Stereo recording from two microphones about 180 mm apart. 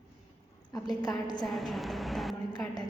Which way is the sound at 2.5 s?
25° left (ahead or behind).